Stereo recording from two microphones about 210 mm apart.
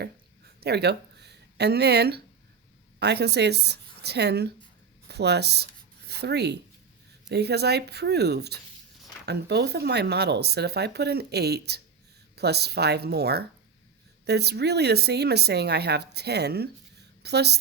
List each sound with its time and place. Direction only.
0.6 s a woman's voice: 50° right (ahead or behind)